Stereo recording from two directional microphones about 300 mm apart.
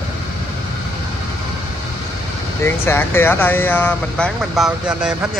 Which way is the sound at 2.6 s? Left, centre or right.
Centre.